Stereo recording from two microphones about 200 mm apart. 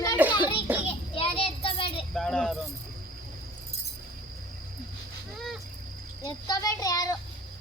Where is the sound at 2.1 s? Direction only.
5° left (ahead or behind).